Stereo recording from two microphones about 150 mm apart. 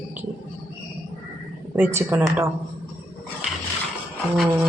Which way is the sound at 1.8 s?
15° right (ahead or behind).